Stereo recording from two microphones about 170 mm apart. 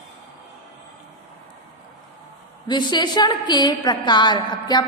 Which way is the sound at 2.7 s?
25° left (ahead or behind).